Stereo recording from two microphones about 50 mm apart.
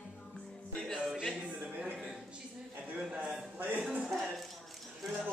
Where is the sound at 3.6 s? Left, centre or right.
Right.